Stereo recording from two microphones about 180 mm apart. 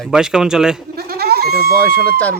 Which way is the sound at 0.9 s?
60° right (ahead or behind).